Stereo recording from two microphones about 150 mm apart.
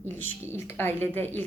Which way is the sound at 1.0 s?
15° left (ahead or behind).